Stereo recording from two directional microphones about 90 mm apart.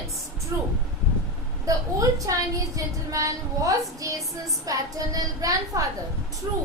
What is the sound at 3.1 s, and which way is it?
Child singing, 40° right (ahead or behind).